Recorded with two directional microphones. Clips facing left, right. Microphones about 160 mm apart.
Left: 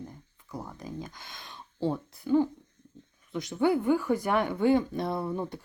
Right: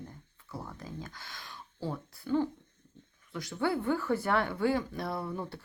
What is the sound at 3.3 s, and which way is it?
Speech, 20° left (ahead or behind).